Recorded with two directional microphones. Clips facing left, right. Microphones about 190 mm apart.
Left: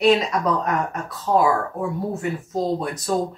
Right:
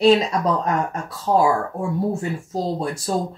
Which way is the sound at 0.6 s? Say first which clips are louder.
Right 1 dB; 30° right (ahead or behind).